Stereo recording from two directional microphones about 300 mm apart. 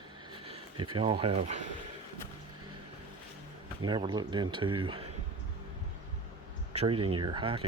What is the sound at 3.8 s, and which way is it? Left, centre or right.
Speech, centre.